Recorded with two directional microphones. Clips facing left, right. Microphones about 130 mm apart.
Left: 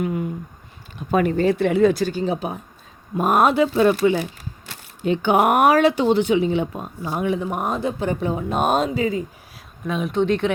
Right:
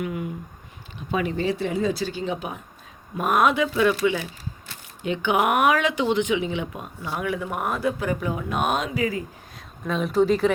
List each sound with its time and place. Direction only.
0.0 s a sound: 35° left (ahead or behind)
0.9 s speech: 50° left (ahead or behind)
7.1 s speech: 25° left (ahead or behind)
9.8 s speech: 5° left (ahead or behind)